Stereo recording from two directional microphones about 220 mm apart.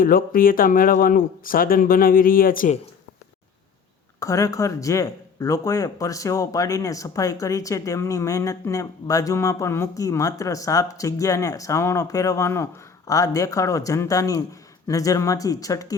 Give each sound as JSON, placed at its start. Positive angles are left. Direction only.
{"t": 0.0, "sound": "speech", "side_deg": 40}
{"t": 4.2, "sound": "speech", "side_deg": 15}